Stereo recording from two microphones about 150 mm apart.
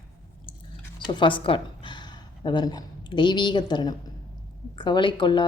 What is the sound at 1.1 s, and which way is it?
A woman's voice, 35° left (ahead or behind).